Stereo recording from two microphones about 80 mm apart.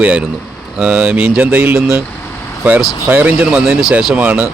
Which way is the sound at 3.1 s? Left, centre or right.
Right.